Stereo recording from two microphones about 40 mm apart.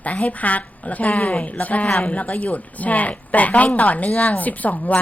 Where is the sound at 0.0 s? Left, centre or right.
Left.